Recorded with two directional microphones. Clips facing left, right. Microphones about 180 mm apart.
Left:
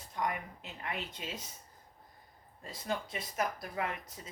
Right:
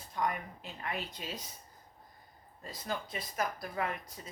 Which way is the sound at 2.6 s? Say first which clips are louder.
Left 1 dB; 25° left (ahead or behind).